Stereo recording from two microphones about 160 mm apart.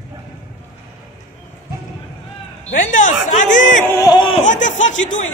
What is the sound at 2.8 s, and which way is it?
Chatter, 55° left (ahead or behind).